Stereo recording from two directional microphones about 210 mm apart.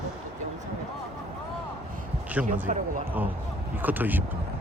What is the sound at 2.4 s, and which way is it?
Speech, 5° right (ahead or behind).